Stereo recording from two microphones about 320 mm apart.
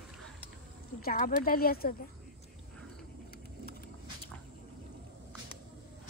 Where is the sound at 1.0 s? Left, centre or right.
Left.